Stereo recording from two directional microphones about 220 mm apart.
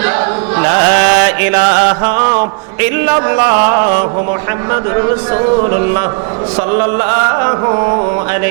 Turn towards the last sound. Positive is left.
turn(degrees=-25)  # may be behind; listen again after turning